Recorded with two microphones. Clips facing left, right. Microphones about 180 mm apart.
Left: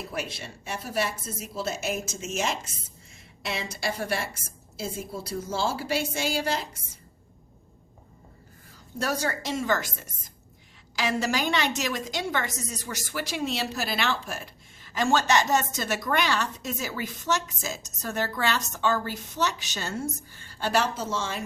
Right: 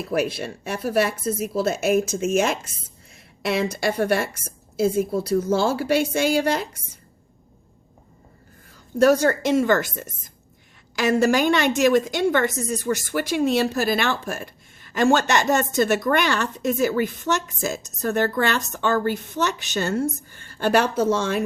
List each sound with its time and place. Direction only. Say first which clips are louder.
0.1 s a woman's voice: right 11 dB; 60° right (ahead or behind)
9.0 s a woman's voice: right 12 dB; 60° right (ahead or behind)